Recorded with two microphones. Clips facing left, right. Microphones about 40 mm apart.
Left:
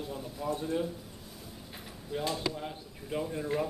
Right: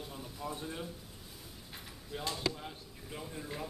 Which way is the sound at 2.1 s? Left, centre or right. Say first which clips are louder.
Left 4 dB; centre.